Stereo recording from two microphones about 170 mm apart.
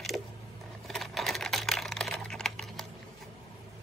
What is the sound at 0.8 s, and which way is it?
Typing, centre (ahead or behind).